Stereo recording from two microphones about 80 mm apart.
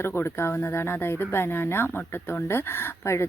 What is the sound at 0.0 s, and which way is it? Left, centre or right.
Speech, left.